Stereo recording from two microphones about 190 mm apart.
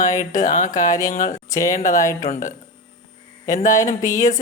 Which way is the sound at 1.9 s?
15° left (ahead or behind).